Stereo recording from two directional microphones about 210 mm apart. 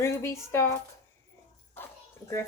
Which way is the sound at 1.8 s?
10° left (ahead or behind).